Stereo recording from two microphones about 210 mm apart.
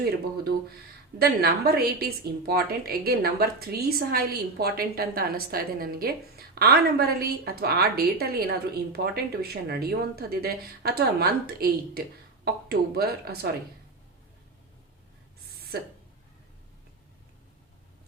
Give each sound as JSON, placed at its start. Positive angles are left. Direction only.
{"t": 1.2, "sound": "a woman's voice", "side_deg": -50}
{"t": 15.7, "sound": "a woman's voice", "side_deg": -45}